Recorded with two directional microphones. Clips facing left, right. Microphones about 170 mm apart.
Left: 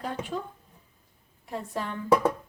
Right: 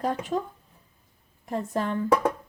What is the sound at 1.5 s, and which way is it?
Speech, 45° right (ahead or behind).